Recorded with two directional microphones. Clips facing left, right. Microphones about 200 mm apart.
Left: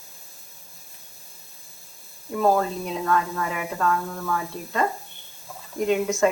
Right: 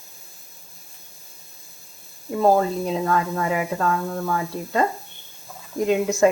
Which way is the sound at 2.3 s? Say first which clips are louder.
Right 3 dB; 30° right (ahead or behind).